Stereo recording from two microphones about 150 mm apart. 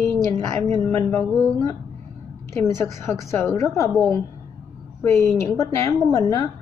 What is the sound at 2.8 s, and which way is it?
A woman's voice, 15° left (ahead or behind).